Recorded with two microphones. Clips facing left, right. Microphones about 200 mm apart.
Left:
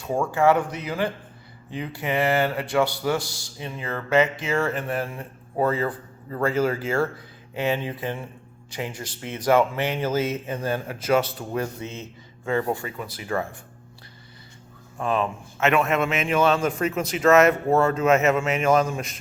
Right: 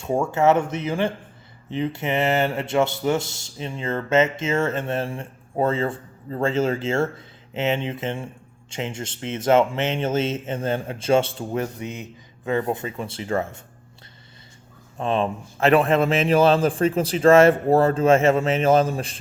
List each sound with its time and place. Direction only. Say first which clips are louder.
0.0 s speech: right 1 dB; 25° right (ahead or behind)
14.9 s a man's voice: right 2 dB; 25° right (ahead or behind)